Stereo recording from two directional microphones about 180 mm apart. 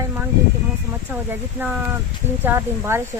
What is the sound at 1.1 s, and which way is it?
Speech, 10° right (ahead or behind).